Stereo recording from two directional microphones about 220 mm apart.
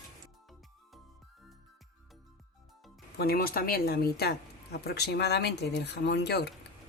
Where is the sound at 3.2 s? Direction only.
45° left (ahead or behind).